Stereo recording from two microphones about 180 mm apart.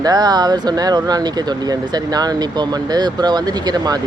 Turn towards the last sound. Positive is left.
turn(degrees=-20)  # may be behind; listen again after turning